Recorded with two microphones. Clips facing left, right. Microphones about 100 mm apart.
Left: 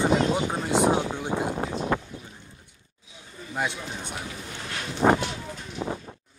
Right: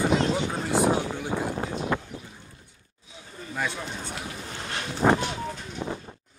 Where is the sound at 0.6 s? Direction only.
20° left (ahead or behind).